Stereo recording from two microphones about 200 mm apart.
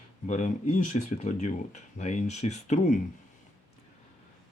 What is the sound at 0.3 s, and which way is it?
Speech, 40° left (ahead or behind).